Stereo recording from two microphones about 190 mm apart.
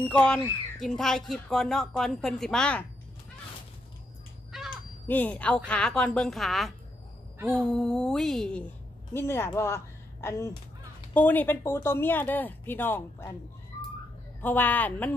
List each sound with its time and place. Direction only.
0.1 s speech: 5° left (ahead or behind)
4.5 s crow: centre (ahead or behind)
5.0 s speech: 10° left (ahead or behind)
14.4 s speech: 10° left (ahead or behind)